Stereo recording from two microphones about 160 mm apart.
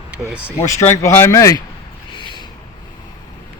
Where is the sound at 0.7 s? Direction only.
20° left (ahead or behind).